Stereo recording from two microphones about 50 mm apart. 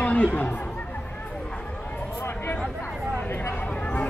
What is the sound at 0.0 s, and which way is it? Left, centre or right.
Chatter, left.